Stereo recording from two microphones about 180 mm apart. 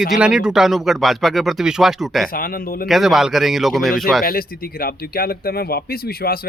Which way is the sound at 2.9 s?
Centre (ahead or behind).